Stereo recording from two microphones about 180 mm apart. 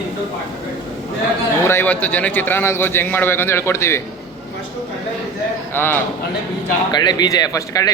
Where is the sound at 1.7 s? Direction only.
10° left (ahead or behind).